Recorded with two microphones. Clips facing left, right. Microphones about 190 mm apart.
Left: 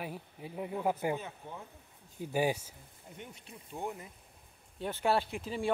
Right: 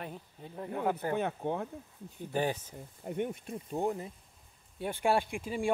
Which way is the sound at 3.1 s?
55° right (ahead or behind).